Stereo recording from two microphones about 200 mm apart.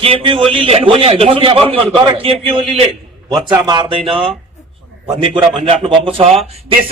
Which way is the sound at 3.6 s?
25° right (ahead or behind).